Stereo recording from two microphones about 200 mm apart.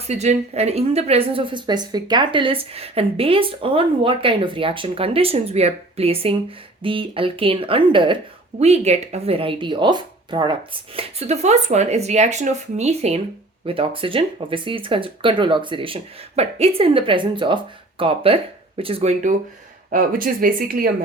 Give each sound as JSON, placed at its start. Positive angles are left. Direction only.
{"t": 0.1, "sound": "a woman's voice", "side_deg": -35}